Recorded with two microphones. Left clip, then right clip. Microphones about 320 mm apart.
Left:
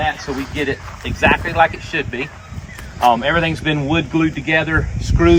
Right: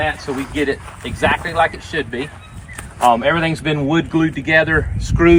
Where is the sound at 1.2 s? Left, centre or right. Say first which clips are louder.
Left 2 dB; centre.